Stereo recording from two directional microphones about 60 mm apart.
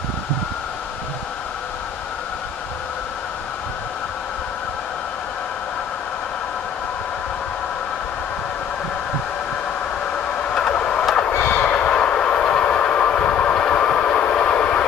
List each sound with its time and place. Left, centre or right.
10.5 s vehicle: centre
11.3 s train: left